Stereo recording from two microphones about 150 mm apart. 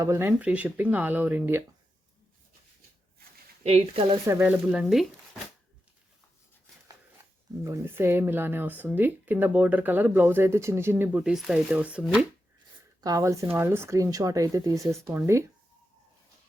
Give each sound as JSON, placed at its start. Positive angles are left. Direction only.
{"t": 0.0, "sound": "speech", "side_deg": -15}
{"t": 3.6, "sound": "speech", "side_deg": -40}
{"t": 4.3, "sound": "speech", "side_deg": -10}
{"t": 7.6, "sound": "speech", "side_deg": -20}
{"t": 13.0, "sound": "speech", "side_deg": -25}